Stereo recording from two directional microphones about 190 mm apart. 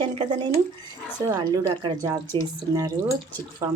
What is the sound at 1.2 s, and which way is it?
A woman's voice, 20° right (ahead or behind).